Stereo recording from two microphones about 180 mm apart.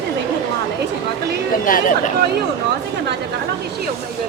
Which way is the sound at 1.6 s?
50° left (ahead or behind).